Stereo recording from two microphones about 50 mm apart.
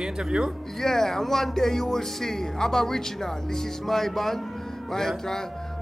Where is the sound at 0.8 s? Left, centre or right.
Centre.